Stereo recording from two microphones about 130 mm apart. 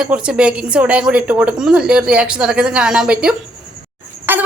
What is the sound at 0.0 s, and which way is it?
A woman's voice, 10° right (ahead or behind).